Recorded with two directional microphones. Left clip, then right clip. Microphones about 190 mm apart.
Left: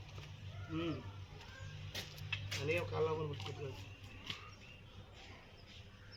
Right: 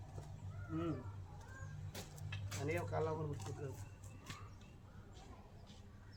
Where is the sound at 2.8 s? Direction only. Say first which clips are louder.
Left 3 dB; 10° right (ahead or behind).